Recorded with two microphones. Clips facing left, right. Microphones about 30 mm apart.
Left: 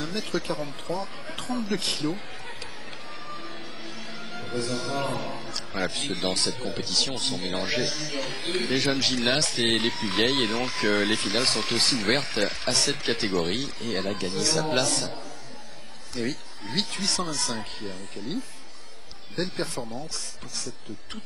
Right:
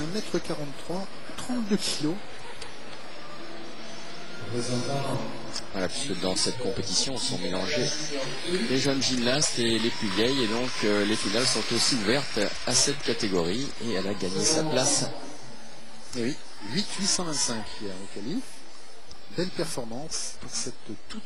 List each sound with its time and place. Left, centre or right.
0.0 s speech: left
4.3 s music: left
4.6 s a man's voice: left
16.2 s speech: left
19.3 s a man's voice: left